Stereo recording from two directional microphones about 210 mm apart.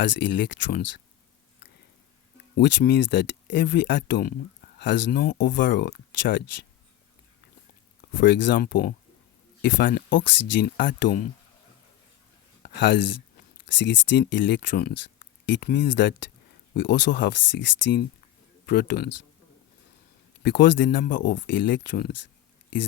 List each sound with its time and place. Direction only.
0.0 s speech: 60° left (ahead or behind)
2.6 s speech: 55° left (ahead or behind)
8.1 s speech: 55° left (ahead or behind)
10.2 s speech: 55° left (ahead or behind)
12.6 s speech: 55° left (ahead or behind)
20.4 s speech: 55° left (ahead or behind)